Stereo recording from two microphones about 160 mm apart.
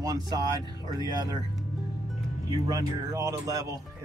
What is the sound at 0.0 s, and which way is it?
Speech, 25° right (ahead or behind).